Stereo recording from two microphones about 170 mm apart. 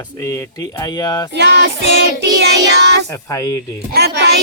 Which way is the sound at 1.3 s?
85° right.